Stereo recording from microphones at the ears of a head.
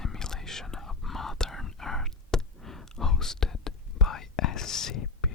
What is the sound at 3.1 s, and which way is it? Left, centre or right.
Whispering, left.